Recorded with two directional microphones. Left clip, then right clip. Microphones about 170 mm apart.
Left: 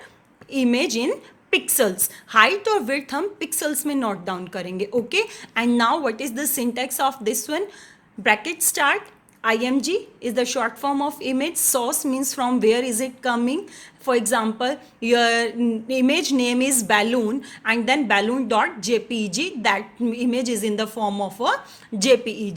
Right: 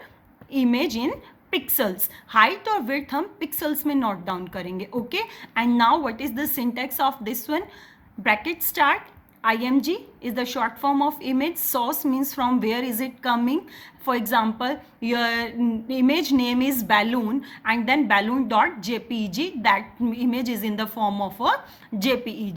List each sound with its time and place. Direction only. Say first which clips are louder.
0.5 s a woman's voice: left 2 dB; 35° left (ahead or behind)